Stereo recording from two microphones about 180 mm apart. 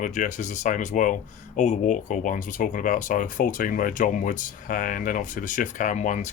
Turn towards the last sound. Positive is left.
turn(degrees=40)  # may be behind; listen again after turning